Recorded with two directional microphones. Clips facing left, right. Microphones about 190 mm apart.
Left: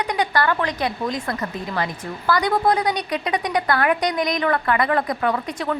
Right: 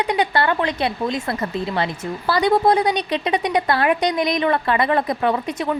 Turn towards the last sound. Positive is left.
turn(degrees=-20)  # may be behind; listen again after turning